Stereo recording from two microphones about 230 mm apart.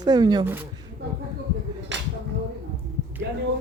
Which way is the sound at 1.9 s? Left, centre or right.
Right.